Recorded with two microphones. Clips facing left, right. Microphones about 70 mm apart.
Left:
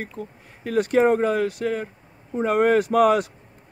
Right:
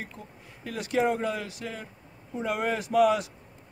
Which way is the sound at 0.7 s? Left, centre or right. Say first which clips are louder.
Left 8 dB; left.